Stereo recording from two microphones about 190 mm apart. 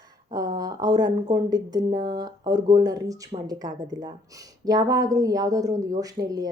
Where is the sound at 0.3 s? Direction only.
20° right (ahead or behind).